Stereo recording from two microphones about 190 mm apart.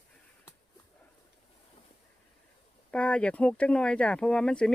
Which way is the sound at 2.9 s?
5° left (ahead or behind).